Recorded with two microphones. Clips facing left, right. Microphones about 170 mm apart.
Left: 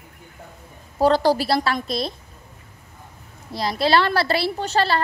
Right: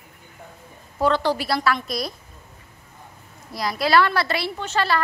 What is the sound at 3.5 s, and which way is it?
A woman's voice, 30° left (ahead or behind).